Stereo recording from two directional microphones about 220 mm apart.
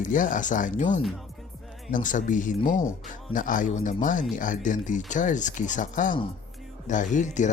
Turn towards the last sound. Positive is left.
turn(degrees=35)  # may be behind; listen again after turning